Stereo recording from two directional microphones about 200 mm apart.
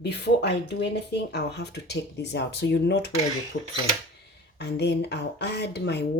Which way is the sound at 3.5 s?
40° left (ahead or behind).